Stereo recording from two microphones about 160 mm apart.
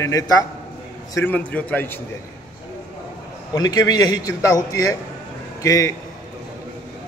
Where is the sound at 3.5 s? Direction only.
25° left (ahead or behind).